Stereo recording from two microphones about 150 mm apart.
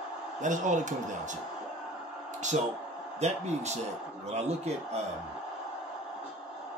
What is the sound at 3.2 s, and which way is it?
Speech, 50° right (ahead or behind).